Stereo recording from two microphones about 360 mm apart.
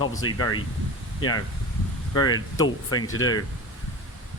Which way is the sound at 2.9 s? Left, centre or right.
Left.